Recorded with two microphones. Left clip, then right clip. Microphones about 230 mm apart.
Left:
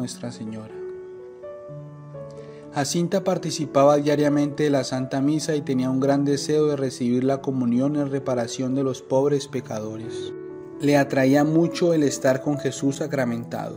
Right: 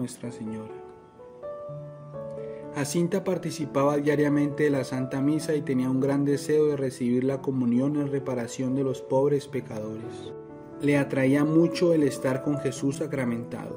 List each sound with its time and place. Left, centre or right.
0.0 s speech: centre
2.7 s speech: centre